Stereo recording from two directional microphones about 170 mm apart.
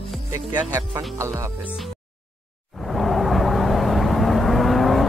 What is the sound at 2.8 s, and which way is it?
Vehicle, centre (ahead or behind).